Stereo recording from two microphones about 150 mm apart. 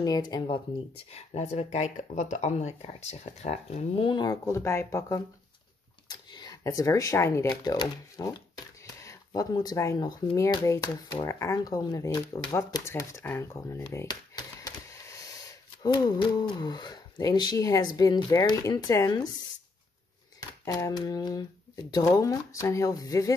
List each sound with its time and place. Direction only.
0.0 s speech: 25° left (ahead or behind)
1.1 s speech: 45° left (ahead or behind); by 19.2 s 25° left (ahead or behind)
20.6 s speech: 25° left (ahead or behind)